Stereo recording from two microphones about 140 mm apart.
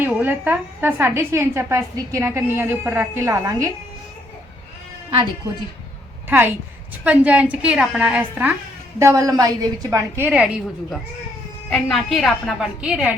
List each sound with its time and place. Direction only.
0.0 s a woman's voice: 15° right (ahead or behind)
6.2 s a woman's voice: 15° right (ahead or behind)
9.0 s a woman's voice: 20° right (ahead or behind)
10.2 s a woman's voice: 5° right (ahead or behind)
11.7 s a woman's voice: 5° left (ahead or behind)